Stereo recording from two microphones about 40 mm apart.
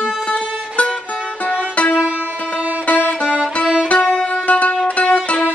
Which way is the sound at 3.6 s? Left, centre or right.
Centre.